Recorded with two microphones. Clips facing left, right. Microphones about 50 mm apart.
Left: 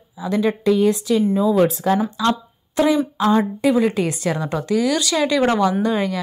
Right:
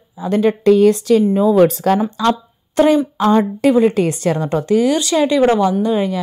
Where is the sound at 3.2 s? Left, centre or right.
Right.